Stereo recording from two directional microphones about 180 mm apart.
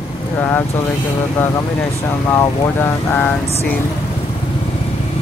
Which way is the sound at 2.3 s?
10° left (ahead or behind).